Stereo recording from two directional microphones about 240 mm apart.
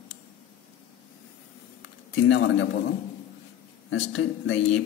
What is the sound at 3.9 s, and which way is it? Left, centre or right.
Speech, left.